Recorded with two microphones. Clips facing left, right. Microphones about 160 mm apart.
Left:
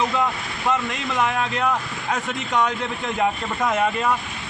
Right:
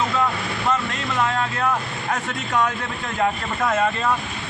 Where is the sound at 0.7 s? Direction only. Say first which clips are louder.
Left 2 dB; 15° left (ahead or behind).